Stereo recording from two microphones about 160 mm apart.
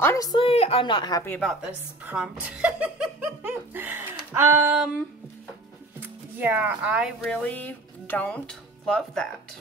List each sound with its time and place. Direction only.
0.0 s a woman's voice: 20° left (ahead or behind)
2.0 s laughter: 5° right (ahead or behind)
4.3 s speech: 15° right (ahead or behind)
5.9 s speech: 10° right (ahead or behind)
7.2 s speech: 5° left (ahead or behind)